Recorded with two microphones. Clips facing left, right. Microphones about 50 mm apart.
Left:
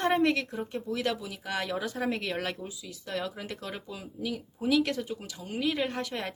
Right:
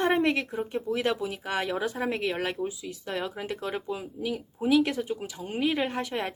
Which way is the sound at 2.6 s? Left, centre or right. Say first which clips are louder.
Right 8 dB; right.